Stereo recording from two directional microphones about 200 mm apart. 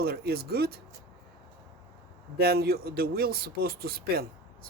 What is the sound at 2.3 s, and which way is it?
Speech, 50° right (ahead or behind).